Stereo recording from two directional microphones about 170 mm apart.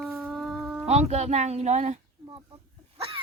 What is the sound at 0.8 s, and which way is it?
Speech, 40° right (ahead or behind).